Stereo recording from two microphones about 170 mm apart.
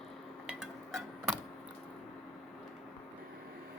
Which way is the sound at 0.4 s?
Centre (ahead or behind).